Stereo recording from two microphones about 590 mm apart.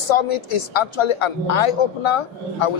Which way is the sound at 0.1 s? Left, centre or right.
Left.